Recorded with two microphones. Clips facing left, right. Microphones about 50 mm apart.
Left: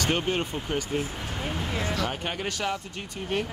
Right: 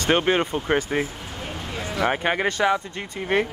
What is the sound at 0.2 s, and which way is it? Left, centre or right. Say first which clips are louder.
Speech: right 7 dB; right.